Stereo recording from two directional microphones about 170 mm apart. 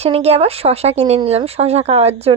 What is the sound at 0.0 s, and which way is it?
A woman's voice, 40° right (ahead or behind).